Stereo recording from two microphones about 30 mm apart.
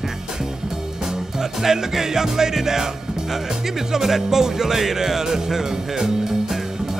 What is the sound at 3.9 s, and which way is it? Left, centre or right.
Music, centre.